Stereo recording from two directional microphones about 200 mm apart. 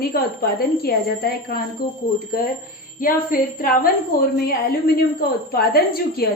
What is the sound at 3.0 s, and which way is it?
Speech, 45° left (ahead or behind).